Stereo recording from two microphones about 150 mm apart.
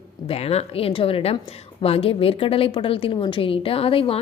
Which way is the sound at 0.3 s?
45° left (ahead or behind).